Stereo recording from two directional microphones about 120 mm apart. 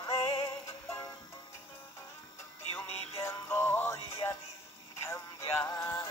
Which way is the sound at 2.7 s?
20° left (ahead or behind).